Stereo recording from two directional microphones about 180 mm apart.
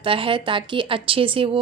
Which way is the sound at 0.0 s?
30° right (ahead or behind).